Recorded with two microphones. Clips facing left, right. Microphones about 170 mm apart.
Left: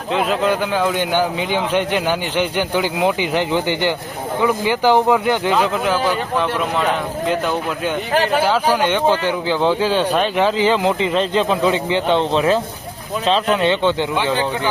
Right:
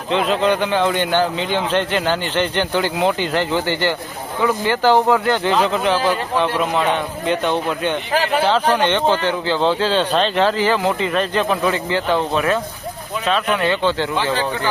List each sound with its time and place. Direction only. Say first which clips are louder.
0.1 s speech: right 1 dB; 5° left (ahead or behind)
5.5 s speech: right 2 dB; 5° left (ahead or behind)